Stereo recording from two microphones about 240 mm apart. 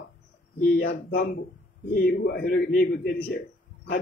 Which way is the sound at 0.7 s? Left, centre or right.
Left.